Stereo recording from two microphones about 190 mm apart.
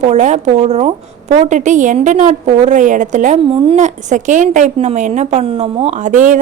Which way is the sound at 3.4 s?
30° right (ahead or behind).